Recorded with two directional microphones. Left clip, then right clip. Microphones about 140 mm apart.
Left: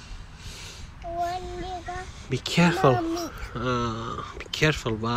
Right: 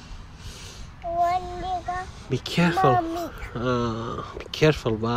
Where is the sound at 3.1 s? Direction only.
20° right (ahead or behind).